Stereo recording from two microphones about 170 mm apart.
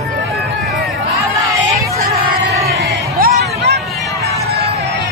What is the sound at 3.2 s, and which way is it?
Music, 60° right (ahead or behind).